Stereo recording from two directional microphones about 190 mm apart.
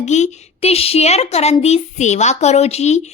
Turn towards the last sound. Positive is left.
turn(degrees=35)  # may be behind; listen again after turning